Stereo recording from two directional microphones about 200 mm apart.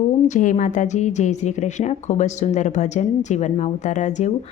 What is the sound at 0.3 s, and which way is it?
A woman's voice, 35° left (ahead or behind).